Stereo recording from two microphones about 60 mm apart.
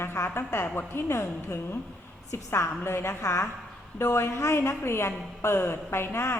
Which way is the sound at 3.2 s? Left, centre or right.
Left.